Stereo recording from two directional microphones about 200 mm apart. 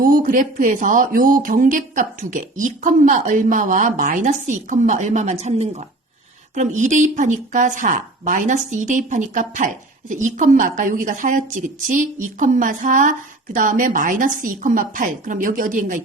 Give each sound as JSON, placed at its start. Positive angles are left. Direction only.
{"t": 0.0, "sound": "a woman's voice", "side_deg": -45}